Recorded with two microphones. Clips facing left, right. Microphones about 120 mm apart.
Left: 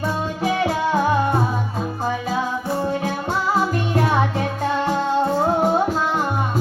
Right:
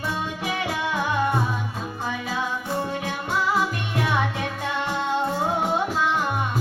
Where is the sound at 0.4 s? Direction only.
35° left (ahead or behind).